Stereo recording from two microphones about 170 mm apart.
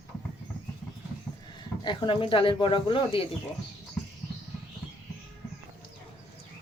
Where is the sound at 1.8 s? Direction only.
30° left (ahead or behind).